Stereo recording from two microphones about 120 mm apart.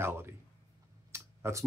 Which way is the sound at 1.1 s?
20° right (ahead or behind).